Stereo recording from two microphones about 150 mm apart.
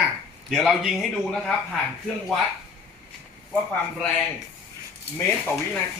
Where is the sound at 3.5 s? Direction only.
10° left (ahead or behind).